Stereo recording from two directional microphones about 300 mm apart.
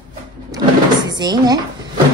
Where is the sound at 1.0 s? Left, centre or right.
Centre.